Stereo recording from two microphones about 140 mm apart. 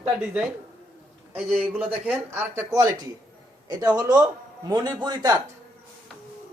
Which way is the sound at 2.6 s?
25° right (ahead or behind).